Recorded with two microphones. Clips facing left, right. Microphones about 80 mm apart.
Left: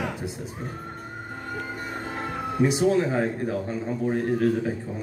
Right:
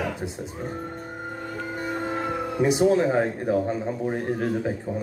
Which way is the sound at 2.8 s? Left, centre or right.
Right.